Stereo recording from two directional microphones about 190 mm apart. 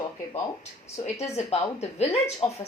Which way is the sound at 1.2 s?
35° left (ahead or behind).